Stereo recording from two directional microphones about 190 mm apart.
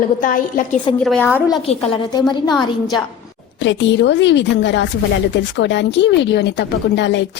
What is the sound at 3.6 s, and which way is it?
A woman's voice, 70° left (ahead or behind).